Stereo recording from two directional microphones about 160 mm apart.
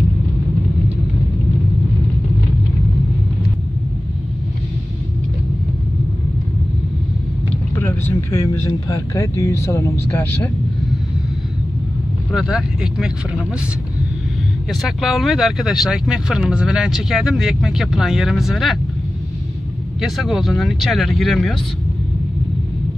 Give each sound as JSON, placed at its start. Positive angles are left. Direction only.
{"t": 7.7, "sound": "speech", "side_deg": 15}
{"t": 12.3, "sound": "speech", "side_deg": -5}
{"t": 14.7, "sound": "speech", "side_deg": 0}
{"t": 20.0, "sound": "speech", "side_deg": 0}